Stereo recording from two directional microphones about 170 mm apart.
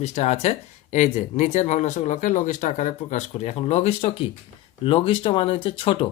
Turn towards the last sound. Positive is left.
turn(degrees=30)  # may be behind; listen again after turning